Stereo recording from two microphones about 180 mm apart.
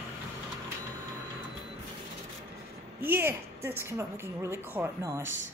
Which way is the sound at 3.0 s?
10° right (ahead or behind).